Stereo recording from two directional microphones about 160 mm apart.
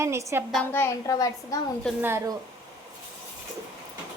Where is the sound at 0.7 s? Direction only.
15° left (ahead or behind).